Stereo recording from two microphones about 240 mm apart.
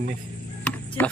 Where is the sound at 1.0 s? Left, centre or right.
Centre.